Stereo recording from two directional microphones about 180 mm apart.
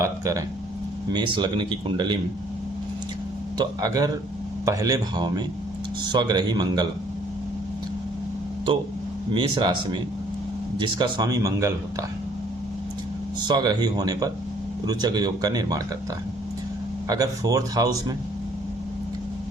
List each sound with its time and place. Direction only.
0.0 s a sound: 15° right (ahead or behind)
1.1 s speech: 25° right (ahead or behind)
3.6 s speech: 20° right (ahead or behind)
9.3 s speech: 25° right (ahead or behind)
13.4 s speech: 20° right (ahead or behind)
17.1 s speech: 20° right (ahead or behind)